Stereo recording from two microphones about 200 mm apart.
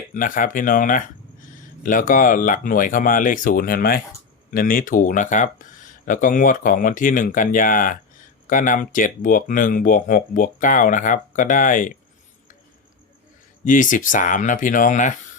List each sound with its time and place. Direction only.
0.1 s speech: 40° left (ahead or behind)
13.7 s speech: 40° left (ahead or behind)